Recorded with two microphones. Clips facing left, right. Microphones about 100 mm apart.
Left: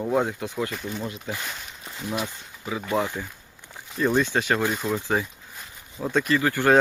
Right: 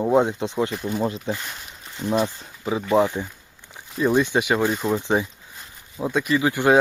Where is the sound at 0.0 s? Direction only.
25° right (ahead or behind).